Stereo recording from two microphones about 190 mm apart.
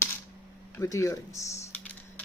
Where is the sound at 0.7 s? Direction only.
15° left (ahead or behind).